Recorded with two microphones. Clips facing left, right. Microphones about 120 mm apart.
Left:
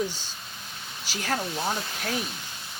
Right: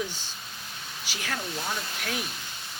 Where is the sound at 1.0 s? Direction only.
40° left (ahead or behind).